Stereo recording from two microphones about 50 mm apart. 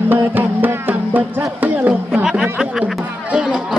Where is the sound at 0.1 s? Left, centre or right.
Right.